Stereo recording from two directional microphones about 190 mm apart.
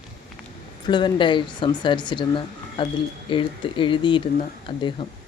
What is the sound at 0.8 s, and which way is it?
Speech, 25° left (ahead or behind).